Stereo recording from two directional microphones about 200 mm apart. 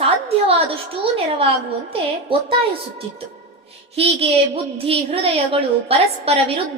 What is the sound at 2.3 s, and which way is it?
Speech, 25° right (ahead or behind).